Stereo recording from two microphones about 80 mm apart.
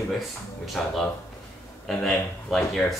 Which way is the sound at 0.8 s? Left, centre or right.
Centre.